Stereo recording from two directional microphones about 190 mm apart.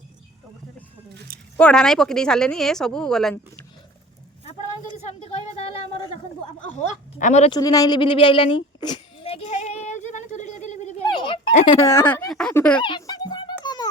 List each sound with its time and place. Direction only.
1.5 s speech: 5° left (ahead or behind)
5.2 s a sound: 35° left (ahead or behind)
6.7 s speech: 40° left (ahead or behind)
7.5 s a sound: 20° left (ahead or behind); by 11.0 s 40° left (ahead or behind)
11.6 s speech: 15° left (ahead or behind)
12.8 s music: 20° left (ahead or behind)